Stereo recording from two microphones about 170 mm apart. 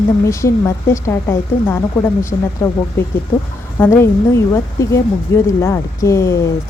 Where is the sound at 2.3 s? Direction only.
25° left (ahead or behind).